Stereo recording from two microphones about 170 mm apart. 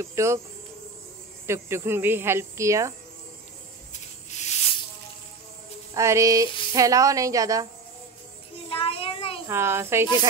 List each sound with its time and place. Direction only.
0.0 s speech: 15° right (ahead or behind)
1.5 s speech: 15° right (ahead or behind)
4.3 s a sound: 40° left (ahead or behind)
5.9 s a woman's voice: 15° right (ahead or behind)
8.6 s child singing: 35° left (ahead or behind)
9.5 s speech: 15° right (ahead or behind)